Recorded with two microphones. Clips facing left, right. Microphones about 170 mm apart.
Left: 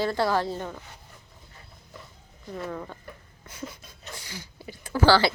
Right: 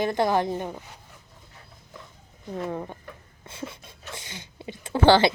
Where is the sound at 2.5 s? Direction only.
25° right (ahead or behind).